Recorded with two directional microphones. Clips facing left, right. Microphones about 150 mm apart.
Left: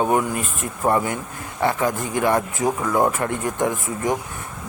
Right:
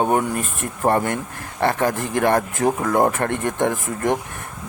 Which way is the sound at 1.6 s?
65° right (ahead or behind).